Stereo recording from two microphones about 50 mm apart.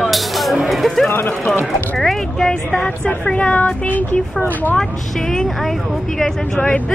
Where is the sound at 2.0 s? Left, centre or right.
Centre.